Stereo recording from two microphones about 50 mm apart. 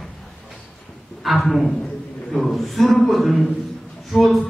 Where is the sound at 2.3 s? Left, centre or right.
Centre.